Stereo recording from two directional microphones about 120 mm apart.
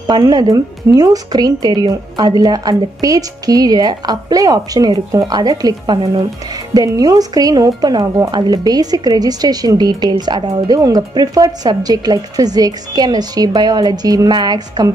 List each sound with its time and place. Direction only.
0.0 s speech: 35° right (ahead or behind)
6.7 s speech: 30° right (ahead or behind)